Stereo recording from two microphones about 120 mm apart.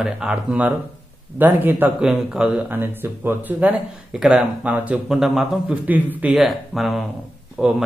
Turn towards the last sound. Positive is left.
turn(degrees=-5)  # may be behind; listen again after turning